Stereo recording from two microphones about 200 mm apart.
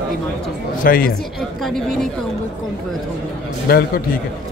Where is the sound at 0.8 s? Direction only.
45° left (ahead or behind).